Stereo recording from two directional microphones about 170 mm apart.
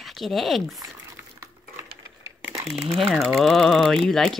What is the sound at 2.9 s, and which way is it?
Speech, centre (ahead or behind).